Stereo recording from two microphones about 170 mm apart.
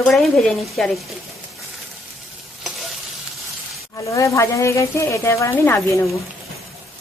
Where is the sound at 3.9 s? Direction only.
20° left (ahead or behind).